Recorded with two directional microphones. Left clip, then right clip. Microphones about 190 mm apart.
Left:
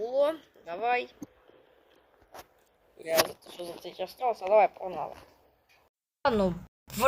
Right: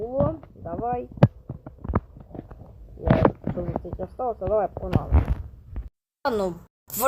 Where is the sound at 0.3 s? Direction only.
50° left (ahead or behind).